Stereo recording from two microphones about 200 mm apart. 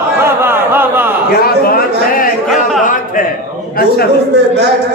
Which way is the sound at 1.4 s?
45° left (ahead or behind).